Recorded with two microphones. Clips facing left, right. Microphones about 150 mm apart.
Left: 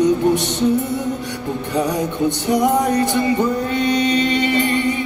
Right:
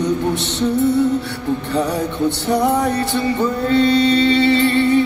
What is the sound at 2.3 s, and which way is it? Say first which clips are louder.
Music: even; 15° left (ahead or behind).